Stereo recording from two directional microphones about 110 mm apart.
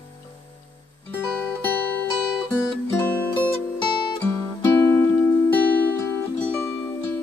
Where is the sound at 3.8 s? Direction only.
45° left (ahead or behind).